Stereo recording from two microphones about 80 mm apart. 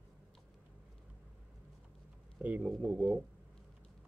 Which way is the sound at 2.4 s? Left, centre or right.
Centre.